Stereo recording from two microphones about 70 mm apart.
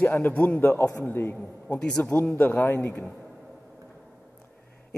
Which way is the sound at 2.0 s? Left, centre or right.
Left.